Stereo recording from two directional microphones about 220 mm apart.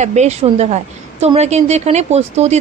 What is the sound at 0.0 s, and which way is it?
A woman's voice, 30° right (ahead or behind).